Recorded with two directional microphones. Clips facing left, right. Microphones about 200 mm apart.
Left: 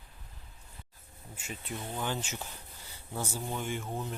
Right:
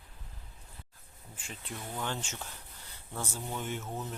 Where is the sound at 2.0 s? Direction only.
5° left (ahead or behind).